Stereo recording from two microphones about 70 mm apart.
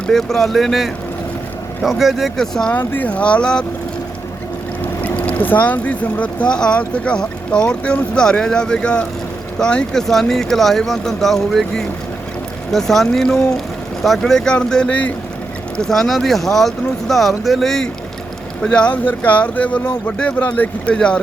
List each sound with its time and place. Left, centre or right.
0.1 s speech: centre
2.7 s speech: left
4.8 s speech: left
15.8 s speech: centre
18.6 s speech: centre